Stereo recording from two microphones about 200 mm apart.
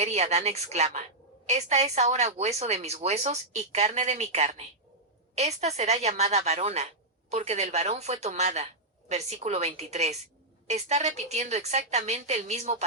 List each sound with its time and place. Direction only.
0.0 s a woman's voice: 35° right (ahead or behind)